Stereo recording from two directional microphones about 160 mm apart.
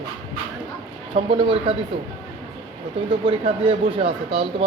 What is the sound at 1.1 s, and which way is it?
Speech, 35° right (ahead or behind).